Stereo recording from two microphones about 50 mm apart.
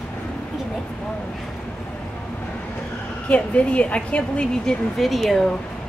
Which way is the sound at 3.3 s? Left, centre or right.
Left.